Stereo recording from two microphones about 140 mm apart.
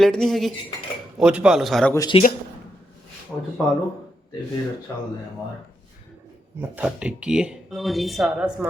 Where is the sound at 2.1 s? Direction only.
40° left (ahead or behind).